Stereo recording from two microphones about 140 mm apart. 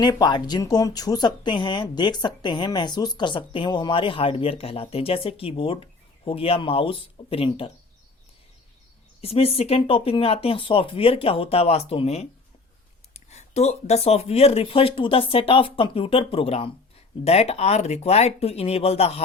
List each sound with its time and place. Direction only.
0.0 s speech: 30° left (ahead or behind)
9.2 s speech: 45° left (ahead or behind)